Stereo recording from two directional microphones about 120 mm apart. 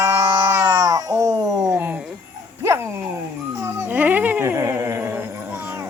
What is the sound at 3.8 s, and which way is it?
Dog, 15° right (ahead or behind).